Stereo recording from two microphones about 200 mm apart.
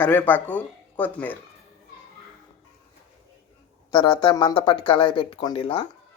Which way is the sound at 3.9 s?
20° left (ahead or behind).